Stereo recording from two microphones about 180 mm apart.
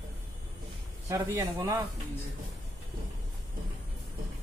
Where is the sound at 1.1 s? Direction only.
15° right (ahead or behind).